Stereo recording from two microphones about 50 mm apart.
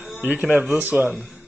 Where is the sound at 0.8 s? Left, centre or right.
Right.